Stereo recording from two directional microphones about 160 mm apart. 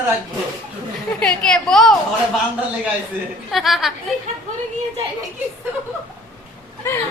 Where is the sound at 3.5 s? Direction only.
Centre (ahead or behind).